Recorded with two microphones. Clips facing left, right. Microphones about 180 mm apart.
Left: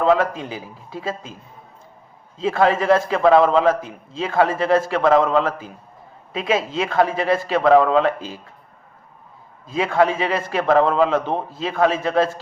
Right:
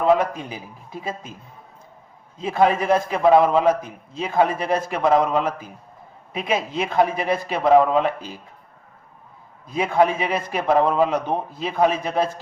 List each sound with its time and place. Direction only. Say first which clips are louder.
0.0 s a man's voice: left 1 dB; 15° right (ahead or behind)
2.4 s a man's voice: left 1 dB; 15° right (ahead or behind)
9.6 s a man's voice: left 1 dB; 15° right (ahead or behind)